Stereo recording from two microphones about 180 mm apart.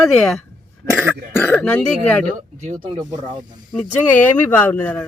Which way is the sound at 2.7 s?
40° right (ahead or behind).